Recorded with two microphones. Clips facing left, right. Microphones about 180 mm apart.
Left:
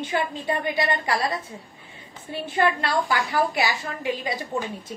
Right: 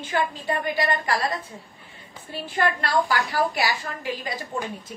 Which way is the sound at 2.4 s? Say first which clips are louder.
Left 2 dB; 25° left (ahead or behind).